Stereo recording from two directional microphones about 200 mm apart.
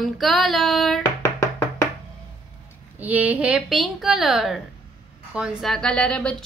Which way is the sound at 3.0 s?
5° right (ahead or behind).